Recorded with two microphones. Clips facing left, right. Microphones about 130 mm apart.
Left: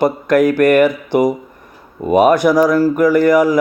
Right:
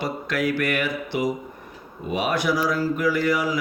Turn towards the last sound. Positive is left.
turn(degrees=45)  # may be behind; listen again after turning